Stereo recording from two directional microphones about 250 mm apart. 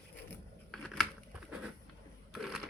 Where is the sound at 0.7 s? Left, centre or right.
Centre.